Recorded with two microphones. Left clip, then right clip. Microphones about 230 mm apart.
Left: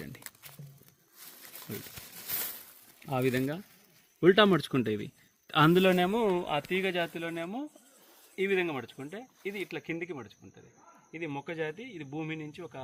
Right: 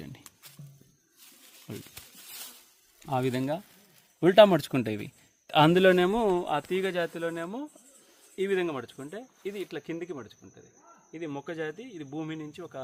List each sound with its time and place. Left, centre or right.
1.7 s speech: right
3.1 s a man's voice: right
6.2 s speech: right